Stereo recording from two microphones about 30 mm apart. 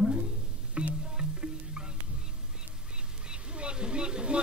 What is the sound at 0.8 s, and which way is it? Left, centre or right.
Music, right.